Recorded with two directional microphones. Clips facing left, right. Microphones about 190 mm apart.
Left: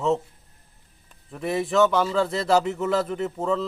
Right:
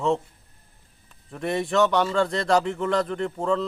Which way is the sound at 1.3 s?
Centre (ahead or behind).